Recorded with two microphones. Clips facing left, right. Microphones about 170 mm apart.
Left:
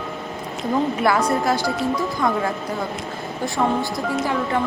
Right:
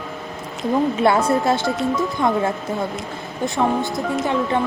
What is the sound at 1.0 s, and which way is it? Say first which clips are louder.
Speech: right 3 dB; 25° right (ahead or behind).